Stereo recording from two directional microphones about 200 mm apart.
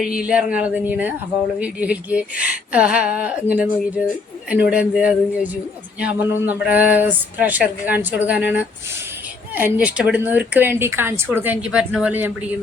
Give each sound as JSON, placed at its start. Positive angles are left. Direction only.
{"t": 0.0, "sound": "speech", "side_deg": -5}